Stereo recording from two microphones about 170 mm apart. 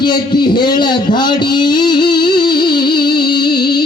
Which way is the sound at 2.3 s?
25° left (ahead or behind).